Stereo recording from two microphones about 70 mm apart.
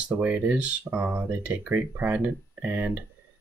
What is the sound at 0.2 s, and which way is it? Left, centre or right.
Speech, right.